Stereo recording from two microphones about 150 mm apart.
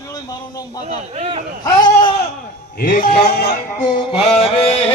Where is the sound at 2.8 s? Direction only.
70° left (ahead or behind); by 3.9 s 90° left.